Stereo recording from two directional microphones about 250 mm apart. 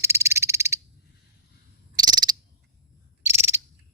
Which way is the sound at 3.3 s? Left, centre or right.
Centre.